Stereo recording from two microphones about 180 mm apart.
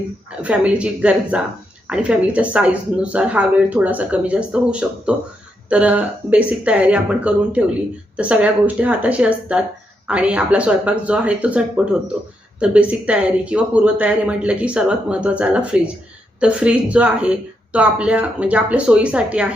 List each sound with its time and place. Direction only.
0.4 s a woman's voice: 5° right (ahead or behind)